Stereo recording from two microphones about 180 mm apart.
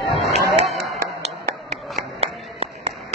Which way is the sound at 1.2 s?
35° right (ahead or behind).